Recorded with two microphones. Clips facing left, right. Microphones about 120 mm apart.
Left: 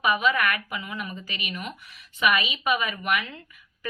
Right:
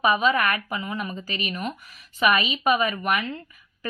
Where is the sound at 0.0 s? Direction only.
30° right (ahead or behind).